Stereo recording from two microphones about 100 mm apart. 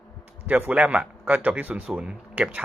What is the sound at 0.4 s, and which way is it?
Speech, 15° right (ahead or behind).